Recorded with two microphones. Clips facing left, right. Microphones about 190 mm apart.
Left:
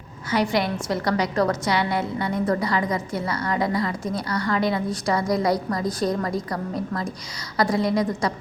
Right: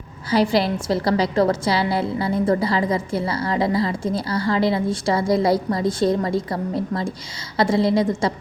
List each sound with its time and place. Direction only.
0.3 s a woman's voice: 30° right (ahead or behind)